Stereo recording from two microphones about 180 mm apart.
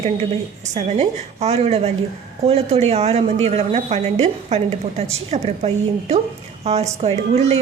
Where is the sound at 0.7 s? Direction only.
40° right (ahead or behind).